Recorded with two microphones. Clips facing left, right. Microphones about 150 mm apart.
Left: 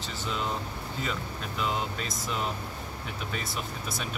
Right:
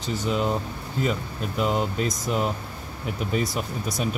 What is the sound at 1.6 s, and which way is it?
Speech, 45° right (ahead or behind).